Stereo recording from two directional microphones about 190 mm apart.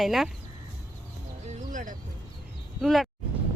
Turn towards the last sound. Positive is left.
turn(degrees=0)  # may be behind; listen again after turning